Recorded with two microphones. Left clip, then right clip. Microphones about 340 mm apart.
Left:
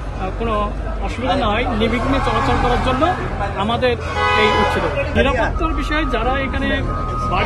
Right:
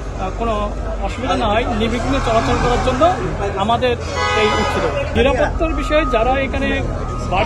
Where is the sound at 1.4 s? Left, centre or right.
Centre.